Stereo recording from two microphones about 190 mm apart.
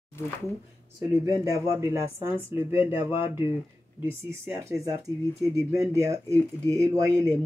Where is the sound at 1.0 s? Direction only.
15° right (ahead or behind).